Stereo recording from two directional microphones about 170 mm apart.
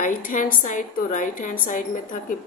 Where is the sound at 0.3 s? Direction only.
50° left (ahead or behind).